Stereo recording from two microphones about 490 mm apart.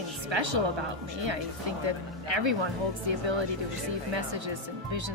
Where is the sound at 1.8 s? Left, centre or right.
Right.